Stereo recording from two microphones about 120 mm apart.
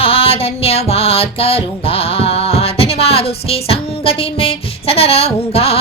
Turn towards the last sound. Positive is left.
turn(degrees=55)  # may be behind; listen again after turning